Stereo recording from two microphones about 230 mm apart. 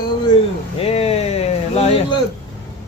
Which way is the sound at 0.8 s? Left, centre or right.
Left.